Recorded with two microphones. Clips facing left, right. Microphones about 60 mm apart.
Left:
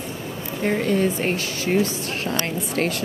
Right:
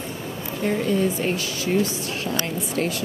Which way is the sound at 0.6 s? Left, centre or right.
Left.